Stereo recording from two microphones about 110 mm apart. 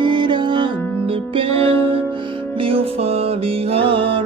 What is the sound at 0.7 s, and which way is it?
Music, 20° left (ahead or behind).